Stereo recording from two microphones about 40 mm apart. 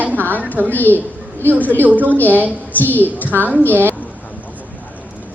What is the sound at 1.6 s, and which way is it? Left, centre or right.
A woman's voice, left.